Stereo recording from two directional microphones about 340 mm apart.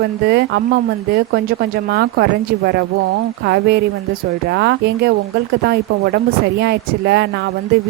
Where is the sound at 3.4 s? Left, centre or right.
Right.